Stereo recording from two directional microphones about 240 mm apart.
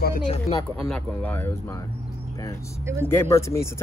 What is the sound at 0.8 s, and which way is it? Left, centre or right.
Speech, centre.